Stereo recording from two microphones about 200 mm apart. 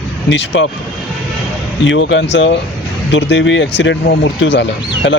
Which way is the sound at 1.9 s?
65° left (ahead or behind).